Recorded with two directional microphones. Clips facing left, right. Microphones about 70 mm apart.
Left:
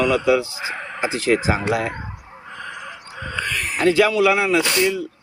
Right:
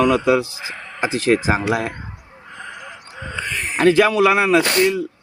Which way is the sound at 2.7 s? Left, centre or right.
Centre.